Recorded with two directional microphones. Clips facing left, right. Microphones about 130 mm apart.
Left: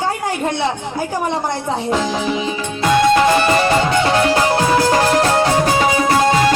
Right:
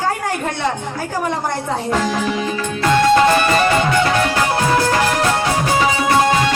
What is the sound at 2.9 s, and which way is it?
Music, 20° left (ahead or behind).